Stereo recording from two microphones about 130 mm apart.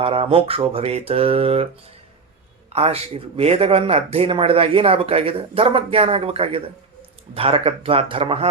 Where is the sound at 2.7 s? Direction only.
50° right (ahead or behind).